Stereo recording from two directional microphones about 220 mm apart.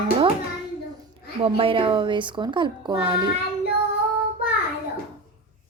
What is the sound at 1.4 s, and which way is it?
Speech, 25° right (ahead or behind).